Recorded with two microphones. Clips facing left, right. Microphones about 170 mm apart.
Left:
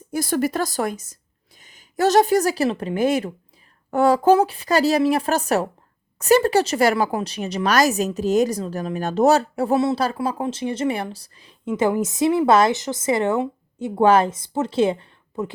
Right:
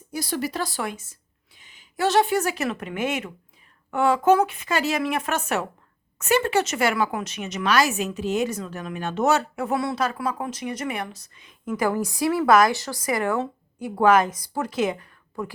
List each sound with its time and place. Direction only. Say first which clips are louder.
0.1 s speech: left 6 dB; 50° left (ahead or behind); by 11.7 s 35° left (ahead or behind)
11.8 s a woman's voice: left 4 dB; 20° left (ahead or behind)